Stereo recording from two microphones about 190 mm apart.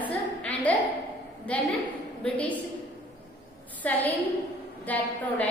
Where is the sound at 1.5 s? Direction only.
5° left (ahead or behind).